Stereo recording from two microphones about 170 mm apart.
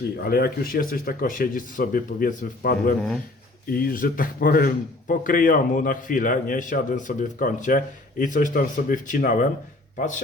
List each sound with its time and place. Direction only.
0.2 s speech: 65° left (ahead or behind)